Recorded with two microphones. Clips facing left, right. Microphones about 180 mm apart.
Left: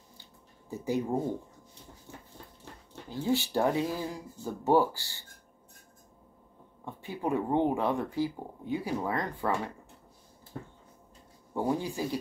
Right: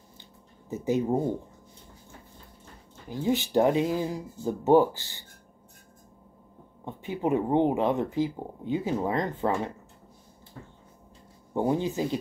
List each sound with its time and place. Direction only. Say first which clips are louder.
0.2 s a sound: right 3 dB; 20° right (ahead or behind)
3.1 s speech: right 2 dB; 15° right (ahead or behind)
6.8 s speech: right 5 dB; 20° right (ahead or behind)
11.5 s speech: right 4 dB; 20° right (ahead or behind)